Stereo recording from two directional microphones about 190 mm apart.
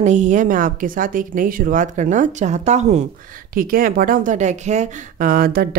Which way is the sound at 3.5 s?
50° right (ahead or behind).